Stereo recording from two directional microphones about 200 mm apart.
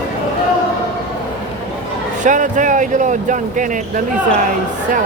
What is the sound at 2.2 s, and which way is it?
Speech, 40° right (ahead or behind).